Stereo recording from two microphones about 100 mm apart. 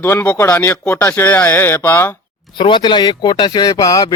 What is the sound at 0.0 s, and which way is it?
Speech, 20° left (ahead or behind).